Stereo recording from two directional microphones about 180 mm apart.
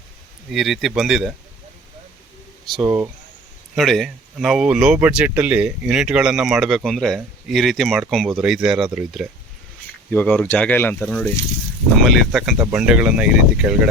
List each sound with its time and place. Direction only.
0.5 s speech: centre (ahead or behind)
2.8 s speech: 10° right (ahead or behind)
3.8 s speech: centre (ahead or behind)
10.1 s speech: 10° left (ahead or behind)